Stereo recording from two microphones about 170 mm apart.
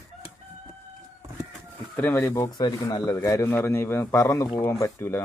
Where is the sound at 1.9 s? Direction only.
15° left (ahead or behind).